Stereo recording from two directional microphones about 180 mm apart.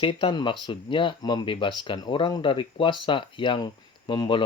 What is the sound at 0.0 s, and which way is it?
Speech, 30° left (ahead or behind).